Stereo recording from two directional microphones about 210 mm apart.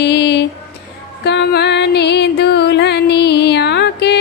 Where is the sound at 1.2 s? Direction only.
55° left (ahead or behind).